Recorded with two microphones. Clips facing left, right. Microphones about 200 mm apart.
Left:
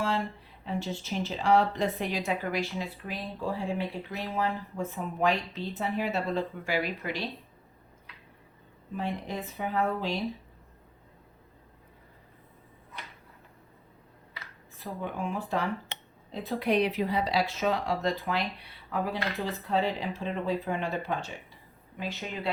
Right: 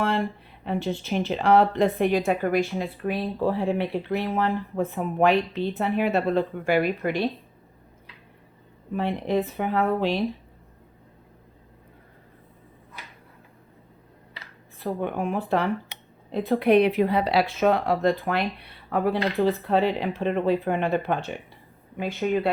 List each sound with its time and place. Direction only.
0.0 s speech: 60° right (ahead or behind)
8.9 s speech: 60° right (ahead or behind)
14.8 s speech: 65° right (ahead or behind)